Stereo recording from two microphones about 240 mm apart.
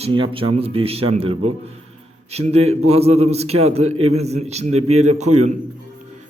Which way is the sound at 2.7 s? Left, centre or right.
Right.